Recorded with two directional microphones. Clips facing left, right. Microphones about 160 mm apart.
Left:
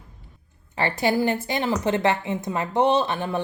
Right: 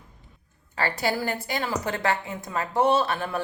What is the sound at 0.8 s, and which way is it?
Speech, 20° left (ahead or behind).